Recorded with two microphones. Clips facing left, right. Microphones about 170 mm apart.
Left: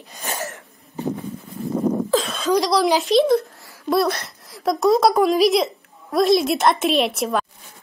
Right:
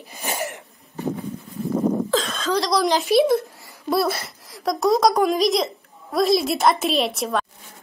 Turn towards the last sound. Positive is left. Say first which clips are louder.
# left 2 dB
turn(degrees=0)  # may be behind; listen again after turning